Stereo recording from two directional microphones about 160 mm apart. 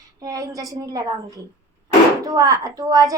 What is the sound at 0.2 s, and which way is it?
Speech, 20° right (ahead or behind).